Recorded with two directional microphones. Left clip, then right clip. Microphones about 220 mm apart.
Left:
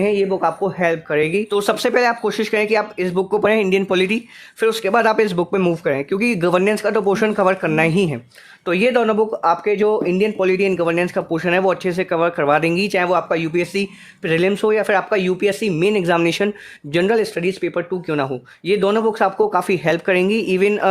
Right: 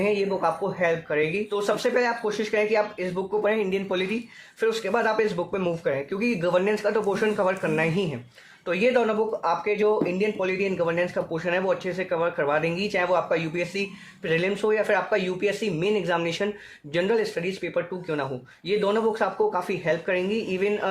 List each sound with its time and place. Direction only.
0.0 s speech: 50° left (ahead or behind)